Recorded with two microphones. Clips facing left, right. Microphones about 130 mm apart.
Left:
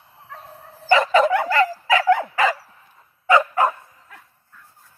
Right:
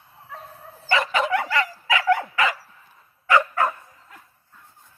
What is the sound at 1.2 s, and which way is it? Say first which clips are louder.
Dog: left 5 dB; 40° left (ahead or behind).